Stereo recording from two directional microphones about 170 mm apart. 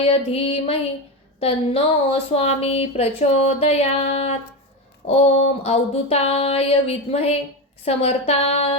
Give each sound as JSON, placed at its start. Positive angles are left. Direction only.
{"t": 0.1, "sound": "a woman's voice", "side_deg": 35}